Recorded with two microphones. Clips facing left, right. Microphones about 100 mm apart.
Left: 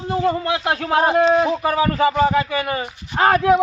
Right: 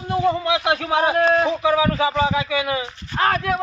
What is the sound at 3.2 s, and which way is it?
Speech, 20° left (ahead or behind).